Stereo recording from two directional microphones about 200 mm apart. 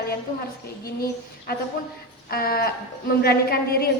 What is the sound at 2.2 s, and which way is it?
A woman's voice, 50° left (ahead or behind).